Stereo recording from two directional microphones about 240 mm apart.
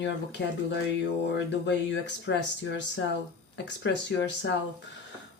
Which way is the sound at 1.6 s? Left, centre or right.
Left.